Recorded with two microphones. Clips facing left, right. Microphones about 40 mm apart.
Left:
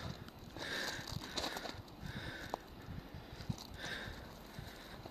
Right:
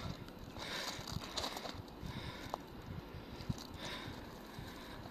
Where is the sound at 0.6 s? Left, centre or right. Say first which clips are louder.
Left 3 dB; centre.